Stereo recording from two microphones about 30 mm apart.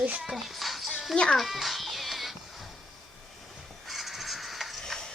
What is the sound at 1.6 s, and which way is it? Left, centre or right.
Music, centre.